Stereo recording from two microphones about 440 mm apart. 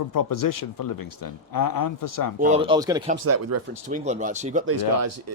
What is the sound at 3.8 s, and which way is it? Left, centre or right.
Speech, centre.